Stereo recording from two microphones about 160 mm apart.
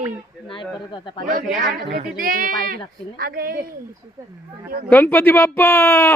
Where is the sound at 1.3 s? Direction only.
60° right (ahead or behind).